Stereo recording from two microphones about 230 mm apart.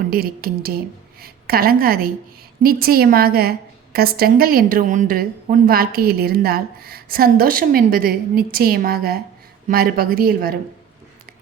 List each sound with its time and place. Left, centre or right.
0.1 s a woman's voice: right